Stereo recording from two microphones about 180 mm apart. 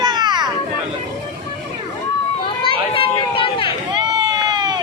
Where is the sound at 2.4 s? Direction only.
30° left (ahead or behind).